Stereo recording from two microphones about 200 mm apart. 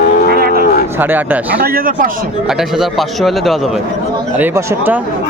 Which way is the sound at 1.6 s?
45° right (ahead or behind).